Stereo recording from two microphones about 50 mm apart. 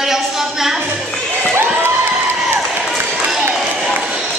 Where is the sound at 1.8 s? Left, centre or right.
Right.